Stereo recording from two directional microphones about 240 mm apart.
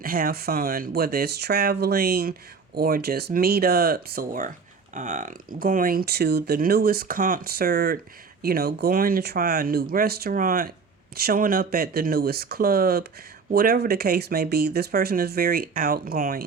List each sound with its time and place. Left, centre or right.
0.0 s speech: right